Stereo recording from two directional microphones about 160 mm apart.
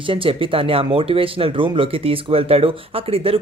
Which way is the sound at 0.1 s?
35° right (ahead or behind).